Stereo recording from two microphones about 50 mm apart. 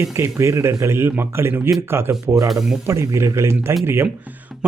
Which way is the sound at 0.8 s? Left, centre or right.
Right.